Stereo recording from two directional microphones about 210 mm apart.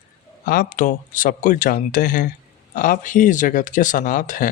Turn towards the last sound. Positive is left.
turn(degrees=40)  # may be behind; listen again after turning